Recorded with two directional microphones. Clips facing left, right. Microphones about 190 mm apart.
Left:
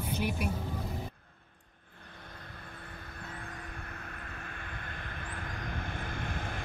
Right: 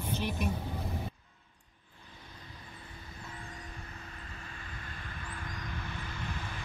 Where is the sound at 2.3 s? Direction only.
60° left (ahead or behind).